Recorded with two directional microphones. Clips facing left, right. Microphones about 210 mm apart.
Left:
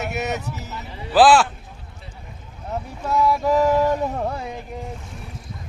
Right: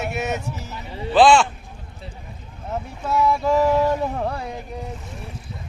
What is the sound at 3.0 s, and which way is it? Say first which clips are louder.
Speech: even; centre (ahead or behind).